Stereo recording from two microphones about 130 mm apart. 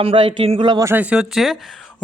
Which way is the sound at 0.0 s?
45° right (ahead or behind).